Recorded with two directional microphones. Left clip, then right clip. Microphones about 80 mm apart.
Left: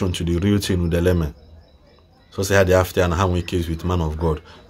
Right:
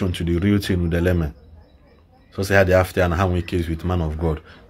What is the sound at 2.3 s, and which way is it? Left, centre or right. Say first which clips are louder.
Speech: even; left.